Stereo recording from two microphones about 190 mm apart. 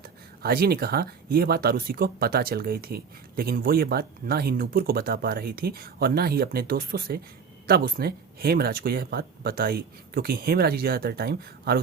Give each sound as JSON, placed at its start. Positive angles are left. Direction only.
{"t": 0.0, "sound": "speech", "side_deg": -50}